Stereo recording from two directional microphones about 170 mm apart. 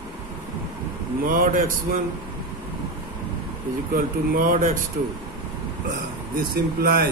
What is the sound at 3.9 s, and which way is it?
Speech, 55° right (ahead or behind).